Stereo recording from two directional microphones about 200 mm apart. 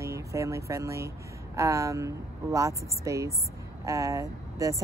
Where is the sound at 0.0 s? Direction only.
15° right (ahead or behind).